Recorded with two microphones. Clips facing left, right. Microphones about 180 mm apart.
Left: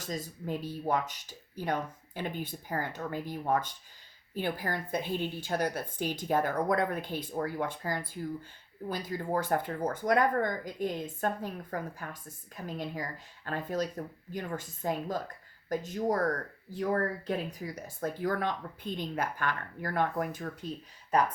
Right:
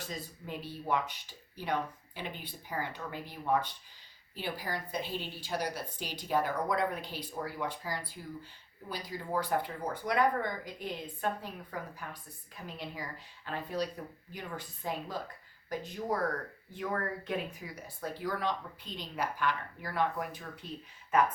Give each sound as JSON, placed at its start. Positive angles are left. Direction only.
{"t": 0.0, "sound": "a woman's voice", "side_deg": 40}